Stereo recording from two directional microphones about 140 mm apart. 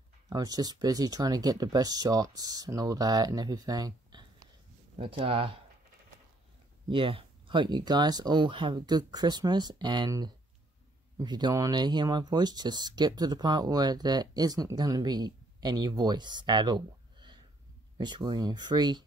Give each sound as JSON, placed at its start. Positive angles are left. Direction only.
{"t": 0.3, "sound": "speech", "side_deg": -25}
{"t": 4.9, "sound": "speech", "side_deg": -40}
{"t": 6.9, "sound": "speech", "side_deg": -40}